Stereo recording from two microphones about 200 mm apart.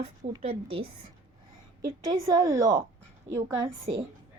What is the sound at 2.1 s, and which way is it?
Speech, 20° right (ahead or behind).